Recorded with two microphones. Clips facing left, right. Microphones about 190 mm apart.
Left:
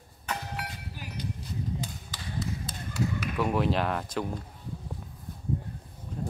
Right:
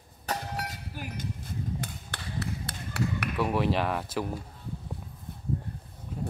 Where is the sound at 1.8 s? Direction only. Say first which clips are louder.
Even; 60° right (ahead or behind).